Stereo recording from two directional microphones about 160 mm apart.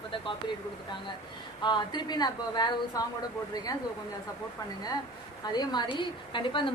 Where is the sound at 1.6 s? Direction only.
25° left (ahead or behind).